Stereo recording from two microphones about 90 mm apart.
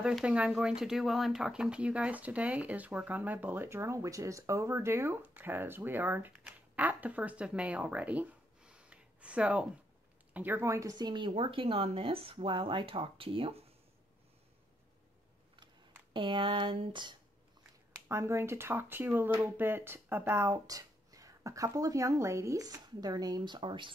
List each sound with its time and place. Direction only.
0.0 s speech: 10° right (ahead or behind); by 11.0 s 35° right (ahead or behind)
11.0 s speech: 60° right (ahead or behind); by 13.7 s 90° right
15.5 s speech: 65° right (ahead or behind)
18.0 s speech: 30° right (ahead or behind); by 23.9 s 65° right (ahead or behind)